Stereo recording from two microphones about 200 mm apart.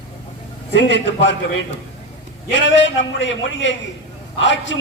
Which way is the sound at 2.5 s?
65° left (ahead or behind).